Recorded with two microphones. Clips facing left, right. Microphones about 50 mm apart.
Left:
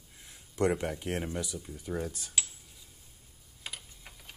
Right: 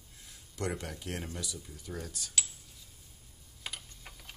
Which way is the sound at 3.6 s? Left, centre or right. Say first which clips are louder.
Right 1 dB; centre.